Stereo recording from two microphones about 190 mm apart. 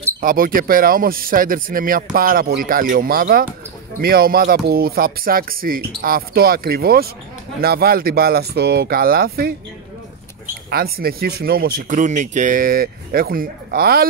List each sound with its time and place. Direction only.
0.2 s speech: 45° right (ahead or behind)
10.7 s speech: 55° right (ahead or behind)